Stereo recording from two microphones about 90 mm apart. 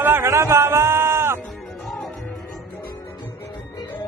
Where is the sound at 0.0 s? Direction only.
30° right (ahead or behind).